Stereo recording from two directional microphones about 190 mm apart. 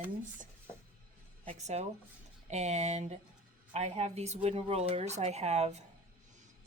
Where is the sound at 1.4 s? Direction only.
35° right (ahead or behind).